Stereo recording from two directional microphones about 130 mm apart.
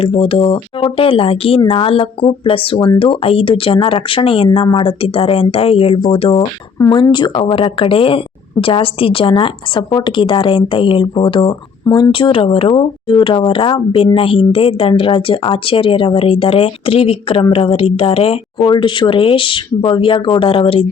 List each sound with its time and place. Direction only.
0.0 s a woman's voice: 45° left (ahead or behind)